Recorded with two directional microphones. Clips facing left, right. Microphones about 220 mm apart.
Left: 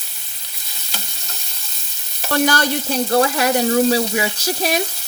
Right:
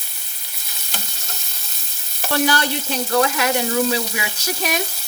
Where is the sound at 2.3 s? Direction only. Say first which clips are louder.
Left 2 dB; 45° left (ahead or behind).